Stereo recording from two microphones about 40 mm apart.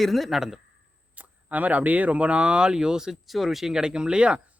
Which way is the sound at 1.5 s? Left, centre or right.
Right.